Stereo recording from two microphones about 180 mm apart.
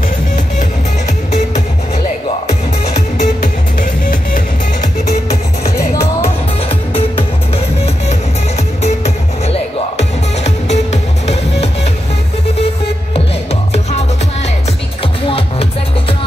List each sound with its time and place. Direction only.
3.8 s music: 50° left (ahead or behind)
6.9 s music: 30° left (ahead or behind)